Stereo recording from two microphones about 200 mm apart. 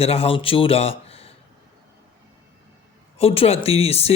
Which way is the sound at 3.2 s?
30° left (ahead or behind).